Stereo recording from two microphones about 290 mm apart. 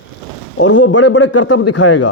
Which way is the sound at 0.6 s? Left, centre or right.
Left.